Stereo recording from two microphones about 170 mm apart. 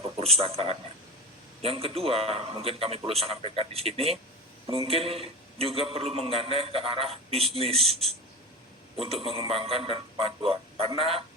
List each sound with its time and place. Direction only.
0.2 s a man's voice: 35° right (ahead or behind)
9.5 s a man's voice: 35° right (ahead or behind)